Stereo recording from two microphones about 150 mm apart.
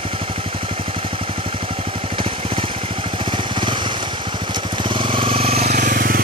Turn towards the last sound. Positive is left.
turn(degrees=-70)  # may be behind; listen again after turning